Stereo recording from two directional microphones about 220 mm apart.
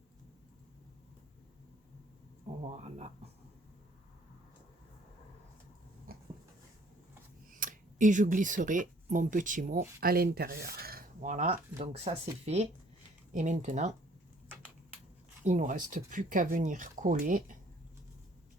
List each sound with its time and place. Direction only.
2.6 s speech: 30° right (ahead or behind)
7.5 s speech: 35° right (ahead or behind)
13.3 s speech: 35° right (ahead or behind)
15.4 s speech: 35° right (ahead or behind)